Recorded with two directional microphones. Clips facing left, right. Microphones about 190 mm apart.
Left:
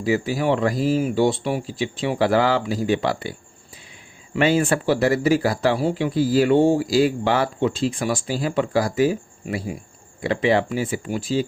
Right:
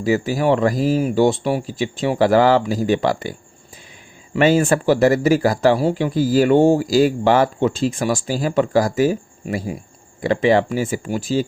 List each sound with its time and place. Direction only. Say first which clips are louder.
0.0 s speech: right 3 dB; 45° right (ahead or behind)
4.4 s speech: right 4 dB; 45° right (ahead or behind)